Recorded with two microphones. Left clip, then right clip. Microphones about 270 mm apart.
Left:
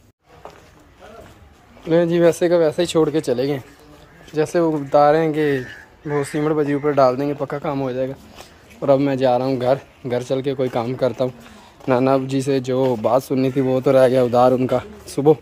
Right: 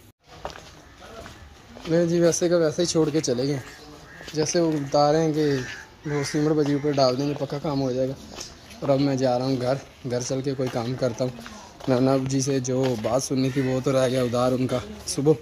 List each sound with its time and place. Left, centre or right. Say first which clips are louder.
2.0 s speech: left 4 dB; left
12.9 s speech: left 7 dB; left
13.2 s speech: left 6 dB; centre